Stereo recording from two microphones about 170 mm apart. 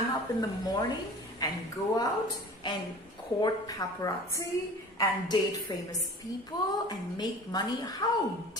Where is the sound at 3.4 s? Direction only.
20° left (ahead or behind).